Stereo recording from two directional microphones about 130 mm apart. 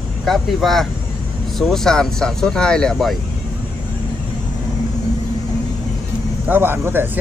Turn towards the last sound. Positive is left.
turn(degrees=-15)  # may be behind; listen again after turning